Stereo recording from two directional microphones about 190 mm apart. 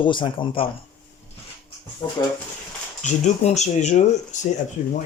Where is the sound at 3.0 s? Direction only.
35° left (ahead or behind).